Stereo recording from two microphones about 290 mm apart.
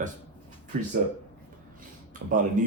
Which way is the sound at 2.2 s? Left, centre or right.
Right.